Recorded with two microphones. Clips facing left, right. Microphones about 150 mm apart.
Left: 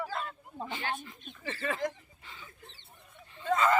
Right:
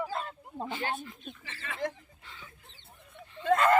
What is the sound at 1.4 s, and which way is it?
Speech, 40° left (ahead or behind).